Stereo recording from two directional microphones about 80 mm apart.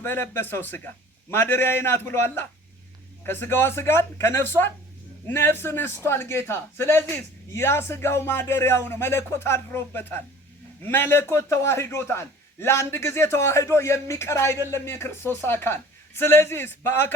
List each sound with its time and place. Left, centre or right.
0.0 s a man's voice: left